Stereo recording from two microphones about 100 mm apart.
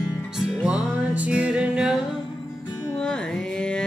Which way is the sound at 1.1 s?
15° right (ahead or behind).